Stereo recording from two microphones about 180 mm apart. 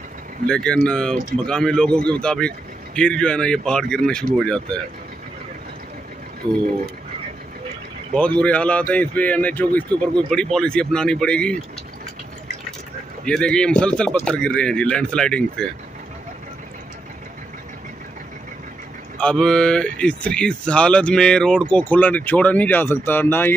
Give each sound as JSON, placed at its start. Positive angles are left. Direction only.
{"t": 0.5, "sound": "speech", "side_deg": 5}
{"t": 6.4, "sound": "speech", "side_deg": -25}
{"t": 8.1, "sound": "speech", "side_deg": 5}
{"t": 13.2, "sound": "speech", "side_deg": 5}
{"t": 19.1, "sound": "speech", "side_deg": 5}